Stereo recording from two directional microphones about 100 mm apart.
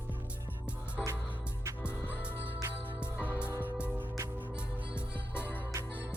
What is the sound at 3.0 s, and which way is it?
Music, 10° right (ahead or behind).